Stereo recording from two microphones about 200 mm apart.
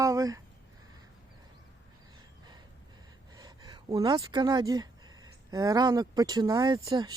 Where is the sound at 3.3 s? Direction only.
20° right (ahead or behind).